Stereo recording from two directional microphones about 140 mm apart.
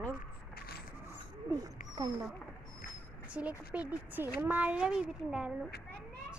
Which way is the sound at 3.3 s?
10° right (ahead or behind).